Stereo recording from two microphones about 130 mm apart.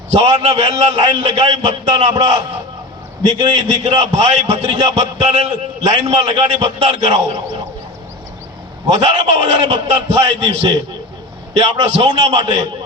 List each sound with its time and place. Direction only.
0.1 s a man's voice: 50° right (ahead or behind)
8.9 s a man's voice: 55° right (ahead or behind)
11.8 s a man's voice: 55° right (ahead or behind)